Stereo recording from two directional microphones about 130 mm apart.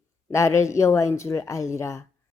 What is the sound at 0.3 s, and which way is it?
A woman's voice, 20° left (ahead or behind).